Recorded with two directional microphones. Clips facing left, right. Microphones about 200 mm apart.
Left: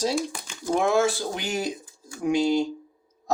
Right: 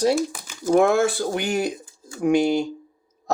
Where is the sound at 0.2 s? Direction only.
5° right (ahead or behind).